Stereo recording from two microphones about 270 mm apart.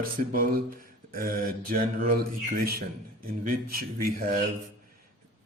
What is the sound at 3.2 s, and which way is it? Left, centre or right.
Speech, right.